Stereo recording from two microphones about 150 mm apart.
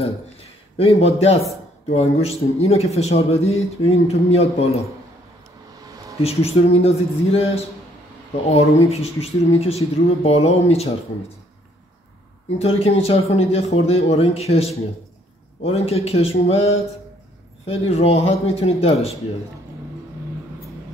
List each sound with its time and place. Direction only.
0.7 s speech: 40° left (ahead or behind)
6.2 s speech: 45° left (ahead or behind)
8.8 s speech: 45° left (ahead or behind)
12.5 s speech: 40° left (ahead or behind)